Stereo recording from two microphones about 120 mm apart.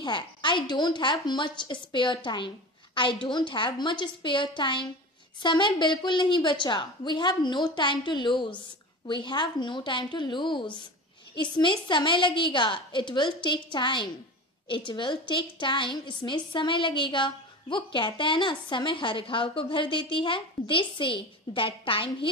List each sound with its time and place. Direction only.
0.0 s a woman's voice: 40° left (ahead or behind)